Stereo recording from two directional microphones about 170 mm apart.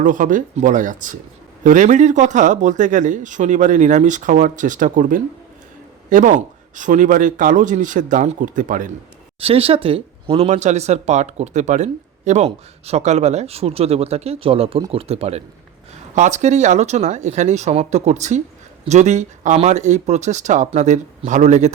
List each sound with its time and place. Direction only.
0.0 s speech: 50° right (ahead or behind)
9.4 s speech: 35° right (ahead or behind)